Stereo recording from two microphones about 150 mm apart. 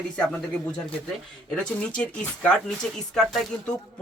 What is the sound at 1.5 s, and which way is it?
A man's voice, 5° left (ahead or behind).